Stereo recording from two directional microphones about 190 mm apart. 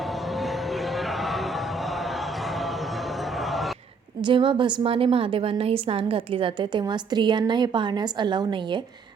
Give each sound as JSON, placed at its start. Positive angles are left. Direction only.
{"t": 0.1, "sound": "music", "side_deg": 0}
{"t": 3.3, "sound": "a sound", "side_deg": 0}
{"t": 4.2, "sound": "a woman's voice", "side_deg": -25}